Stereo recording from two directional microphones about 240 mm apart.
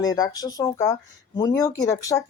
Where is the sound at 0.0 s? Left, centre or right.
Centre.